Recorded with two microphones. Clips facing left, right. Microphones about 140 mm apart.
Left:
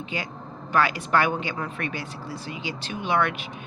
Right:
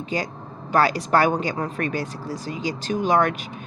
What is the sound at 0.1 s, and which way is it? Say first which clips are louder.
A woman's voice: right 7 dB; 40° right (ahead or behind).